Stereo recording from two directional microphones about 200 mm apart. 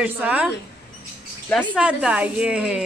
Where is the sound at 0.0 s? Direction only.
10° right (ahead or behind).